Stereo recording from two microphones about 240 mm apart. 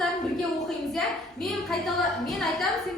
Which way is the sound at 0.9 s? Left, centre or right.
Centre.